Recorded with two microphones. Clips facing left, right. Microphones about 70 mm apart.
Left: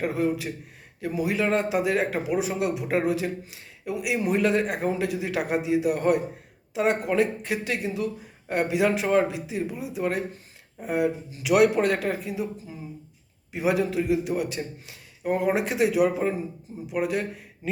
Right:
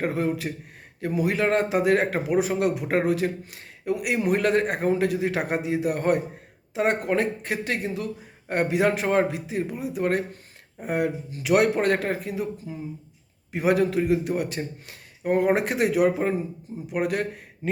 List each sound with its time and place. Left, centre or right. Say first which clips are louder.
0.0 s a man's voice: even; right
13.5 s a man's voice: right 3 dB; right